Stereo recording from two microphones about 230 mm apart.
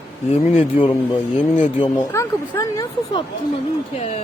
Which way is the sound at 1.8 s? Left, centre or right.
Centre.